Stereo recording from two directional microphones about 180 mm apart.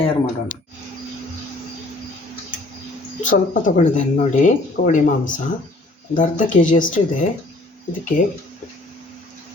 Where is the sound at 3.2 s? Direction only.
45° left (ahead or behind).